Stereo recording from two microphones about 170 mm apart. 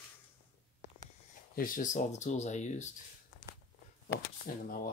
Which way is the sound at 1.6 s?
50° left (ahead or behind).